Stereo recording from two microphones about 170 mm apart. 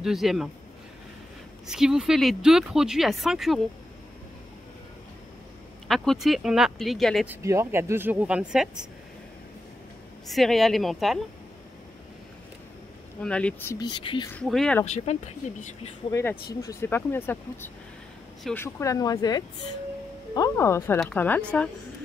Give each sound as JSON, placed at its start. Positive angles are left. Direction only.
{"t": 0.0, "sound": "speech", "side_deg": 0}
{"t": 1.7, "sound": "speech", "side_deg": -5}
{"t": 5.9, "sound": "speech", "side_deg": 0}
{"t": 7.2, "sound": "speech", "side_deg": -15}
{"t": 10.2, "sound": "speech", "side_deg": 0}
{"t": 13.2, "sound": "speech", "side_deg": 5}
{"t": 13.7, "sound": "speech", "side_deg": 25}
{"t": 14.3, "sound": "speech", "side_deg": 5}
{"t": 15.1, "sound": "speech", "side_deg": 40}
{"t": 16.1, "sound": "speech", "side_deg": 15}